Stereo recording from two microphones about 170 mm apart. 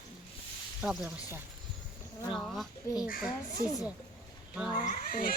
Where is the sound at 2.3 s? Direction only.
Centre (ahead or behind).